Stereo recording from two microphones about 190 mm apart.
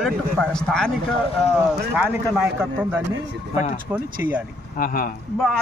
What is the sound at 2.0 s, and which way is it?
A man's voice, 5° right (ahead or behind).